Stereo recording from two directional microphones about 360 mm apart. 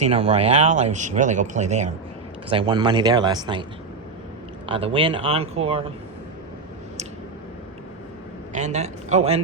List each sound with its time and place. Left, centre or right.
0.0 s speech: centre
4.7 s speech: centre
8.5 s speech: centre